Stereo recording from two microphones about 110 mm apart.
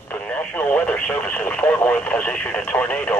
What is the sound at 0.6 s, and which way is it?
Speech, 10° left (ahead or behind).